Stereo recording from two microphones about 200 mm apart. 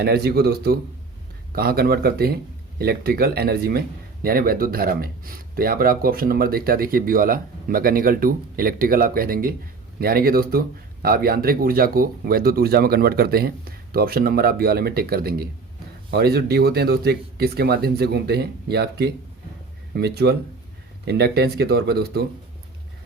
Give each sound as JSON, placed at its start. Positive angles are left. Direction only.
{"t": 0.0, "sound": "speech", "side_deg": -50}